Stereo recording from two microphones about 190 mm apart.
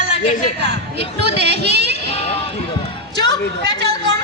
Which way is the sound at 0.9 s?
30° left (ahead or behind).